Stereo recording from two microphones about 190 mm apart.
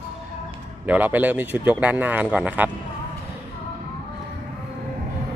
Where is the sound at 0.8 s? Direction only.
10° right (ahead or behind).